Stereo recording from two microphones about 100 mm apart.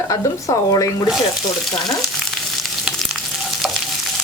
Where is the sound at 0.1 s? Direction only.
40° left (ahead or behind).